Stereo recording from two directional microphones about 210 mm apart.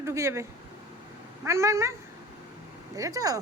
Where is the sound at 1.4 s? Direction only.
15° right (ahead or behind).